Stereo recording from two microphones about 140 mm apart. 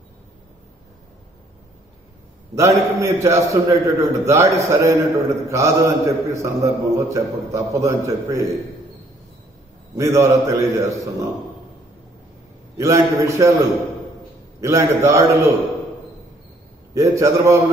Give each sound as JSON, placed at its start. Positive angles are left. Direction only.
{"t": 2.5, "sound": "a man's voice", "side_deg": -20}
{"t": 9.9, "sound": "a man's voice", "side_deg": -20}
{"t": 12.7, "sound": "a man's voice", "side_deg": -20}
{"t": 16.9, "sound": "a man's voice", "side_deg": -20}